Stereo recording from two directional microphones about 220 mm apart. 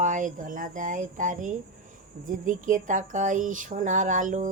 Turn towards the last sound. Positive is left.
turn(degrees=-35)  # may be behind; listen again after turning